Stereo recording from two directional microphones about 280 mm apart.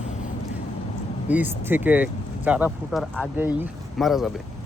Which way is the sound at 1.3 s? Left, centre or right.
Centre.